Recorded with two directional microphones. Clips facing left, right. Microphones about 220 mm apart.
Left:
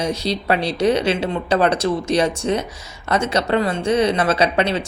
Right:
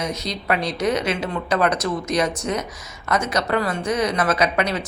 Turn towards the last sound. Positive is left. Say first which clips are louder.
# left 3 dB
turn(degrees=30)  # may be behind; listen again after turning